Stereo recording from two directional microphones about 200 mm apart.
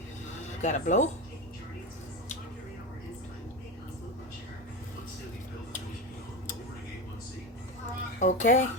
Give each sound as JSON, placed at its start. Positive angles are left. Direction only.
{"t": 0.6, "sound": "speech", "side_deg": 35}
{"t": 8.2, "sound": "speech", "side_deg": 40}